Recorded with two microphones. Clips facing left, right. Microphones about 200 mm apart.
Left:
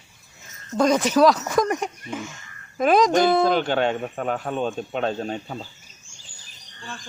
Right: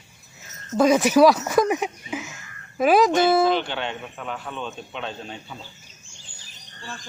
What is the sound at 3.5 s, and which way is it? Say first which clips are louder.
Speech: left 3 dB; 45° left (ahead or behind).